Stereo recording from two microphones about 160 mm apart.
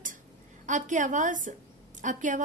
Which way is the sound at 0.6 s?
50° right (ahead or behind).